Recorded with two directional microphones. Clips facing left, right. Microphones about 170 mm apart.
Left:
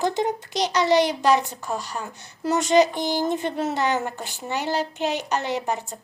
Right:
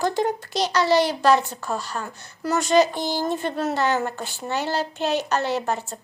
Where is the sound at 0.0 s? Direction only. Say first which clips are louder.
Right 1 dB; 20° left (ahead or behind).